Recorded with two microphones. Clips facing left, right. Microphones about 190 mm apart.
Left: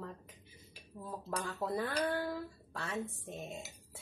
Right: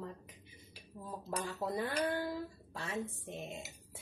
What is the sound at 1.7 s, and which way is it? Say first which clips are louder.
Mantra: left 1 dB; 15° right (ahead or behind).